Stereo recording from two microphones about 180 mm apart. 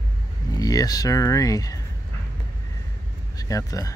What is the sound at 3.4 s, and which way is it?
Speech, 20° left (ahead or behind).